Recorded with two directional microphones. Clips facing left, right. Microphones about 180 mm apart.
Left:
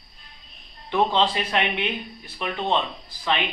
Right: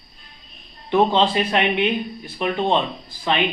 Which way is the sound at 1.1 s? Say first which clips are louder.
Right 4 dB; 25° right (ahead or behind).